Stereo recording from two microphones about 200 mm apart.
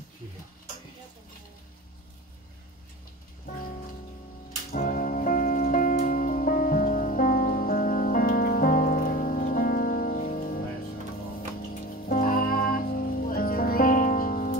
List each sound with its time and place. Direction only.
3.4 s music: 45° left (ahead or behind)
11.7 s music: 40° left (ahead or behind)